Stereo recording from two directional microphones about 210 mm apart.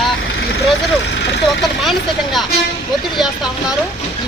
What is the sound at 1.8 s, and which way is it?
Speech, centre (ahead or behind).